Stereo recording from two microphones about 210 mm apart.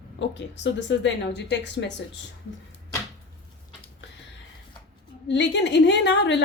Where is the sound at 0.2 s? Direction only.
60° left (ahead or behind).